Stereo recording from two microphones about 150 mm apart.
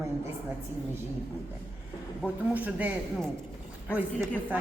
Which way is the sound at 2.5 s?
10° right (ahead or behind).